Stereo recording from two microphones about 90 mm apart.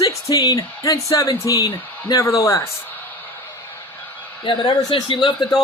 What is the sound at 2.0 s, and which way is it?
Speech, 40° left (ahead or behind).